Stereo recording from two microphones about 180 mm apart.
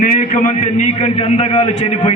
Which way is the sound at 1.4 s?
35° left (ahead or behind).